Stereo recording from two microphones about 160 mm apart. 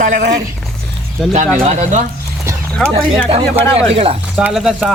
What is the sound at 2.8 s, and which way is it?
Speech, 5° left (ahead or behind).